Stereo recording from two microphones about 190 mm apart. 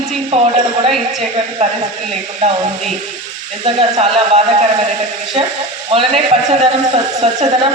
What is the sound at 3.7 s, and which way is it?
Speech, 30° right (ahead or behind).